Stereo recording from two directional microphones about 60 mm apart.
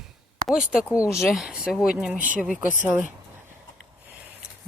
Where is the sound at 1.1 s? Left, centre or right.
Centre.